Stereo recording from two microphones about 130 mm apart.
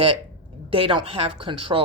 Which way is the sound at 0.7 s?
45° right (ahead or behind).